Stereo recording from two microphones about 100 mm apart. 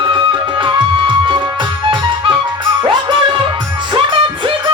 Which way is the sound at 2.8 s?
60° right (ahead or behind).